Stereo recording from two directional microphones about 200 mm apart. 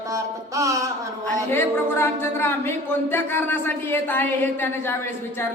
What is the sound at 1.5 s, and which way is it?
A man's voice, 10° left (ahead or behind).